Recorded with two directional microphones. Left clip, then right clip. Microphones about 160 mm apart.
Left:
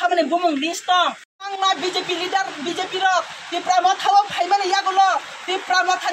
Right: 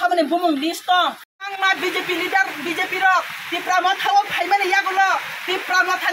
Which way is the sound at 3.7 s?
15° left (ahead or behind).